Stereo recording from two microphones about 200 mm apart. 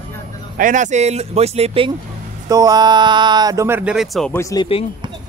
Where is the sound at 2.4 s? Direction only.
15° right (ahead or behind); by 4.4 s centre (ahead or behind).